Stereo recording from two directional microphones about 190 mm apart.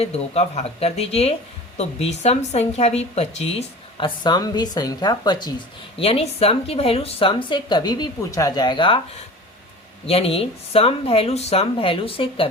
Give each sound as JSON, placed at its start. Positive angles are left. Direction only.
{"t": 0.0, "sound": "a woman's voice", "side_deg": 35}
{"t": 10.1, "sound": "speech", "side_deg": 30}